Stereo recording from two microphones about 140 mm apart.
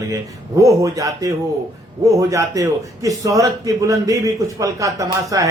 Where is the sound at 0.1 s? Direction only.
25° right (ahead or behind).